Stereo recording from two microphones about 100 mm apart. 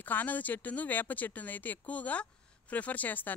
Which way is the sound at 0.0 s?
15° left (ahead or behind).